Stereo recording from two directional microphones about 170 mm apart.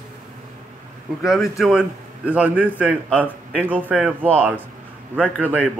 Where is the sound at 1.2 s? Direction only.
Centre (ahead or behind).